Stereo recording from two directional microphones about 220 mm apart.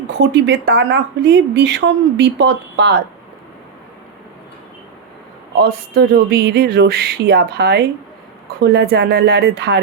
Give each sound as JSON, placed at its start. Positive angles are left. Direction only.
{"t": 0.1, "sound": "speech", "side_deg": -50}
{"t": 5.5, "sound": "speech", "side_deg": -45}